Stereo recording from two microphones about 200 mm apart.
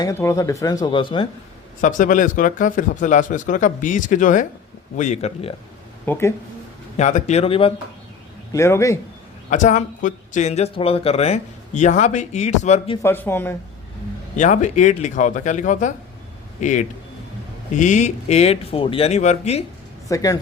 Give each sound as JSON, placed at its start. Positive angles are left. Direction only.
{"t": 0.0, "sound": "speech", "side_deg": 15}
{"t": 1.8, "sound": "speech", "side_deg": 40}
{"t": 6.1, "sound": "speech", "side_deg": 10}
{"t": 6.9, "sound": "speech", "side_deg": 35}
{"t": 8.5, "sound": "speech", "side_deg": 15}
{"t": 9.5, "sound": "speech", "side_deg": 40}
{"t": 13.0, "sound": "speech", "side_deg": 10}
{"t": 14.3, "sound": "speech", "side_deg": 40}
{"t": 20.1, "sound": "speech", "side_deg": 15}